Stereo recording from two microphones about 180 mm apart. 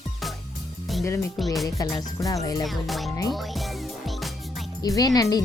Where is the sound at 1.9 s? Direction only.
20° left (ahead or behind).